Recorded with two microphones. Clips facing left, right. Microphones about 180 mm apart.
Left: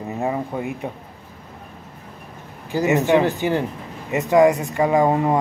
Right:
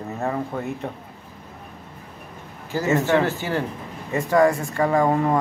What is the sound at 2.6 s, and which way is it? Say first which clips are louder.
Speech: left 3 dB; 15° left (ahead or behind).